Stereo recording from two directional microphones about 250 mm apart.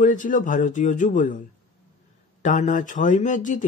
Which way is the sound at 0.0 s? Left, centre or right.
Left.